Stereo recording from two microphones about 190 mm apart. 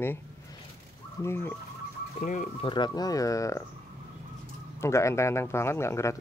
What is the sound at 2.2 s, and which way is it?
Speech, 40° left (ahead or behind).